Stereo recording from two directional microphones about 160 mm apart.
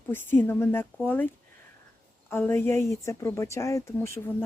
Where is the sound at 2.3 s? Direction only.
15° left (ahead or behind).